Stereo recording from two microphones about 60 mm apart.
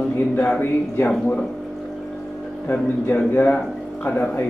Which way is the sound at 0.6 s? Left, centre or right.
Left.